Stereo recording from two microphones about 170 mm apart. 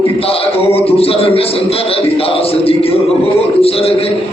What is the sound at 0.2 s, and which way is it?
A man's voice, 35° left (ahead or behind).